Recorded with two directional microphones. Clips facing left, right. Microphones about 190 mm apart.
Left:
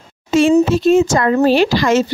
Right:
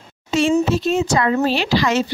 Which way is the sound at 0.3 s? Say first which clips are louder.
Left 5 dB; 50° left (ahead or behind).